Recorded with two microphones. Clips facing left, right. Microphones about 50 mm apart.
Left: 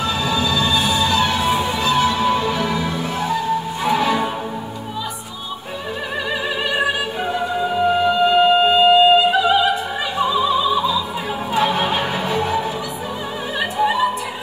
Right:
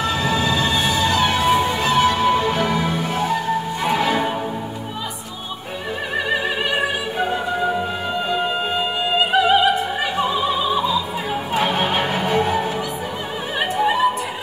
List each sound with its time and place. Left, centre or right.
0.0 s music: right
8.0 s music: left
9.3 s opera: right
11.5 s music: right
13.6 s opera: right